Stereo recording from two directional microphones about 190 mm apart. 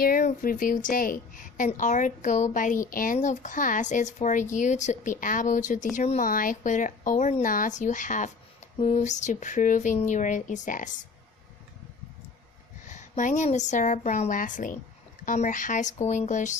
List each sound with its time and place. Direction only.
0.0 s a woman's voice: 45° left (ahead or behind)
12.9 s a woman's voice: 40° left (ahead or behind)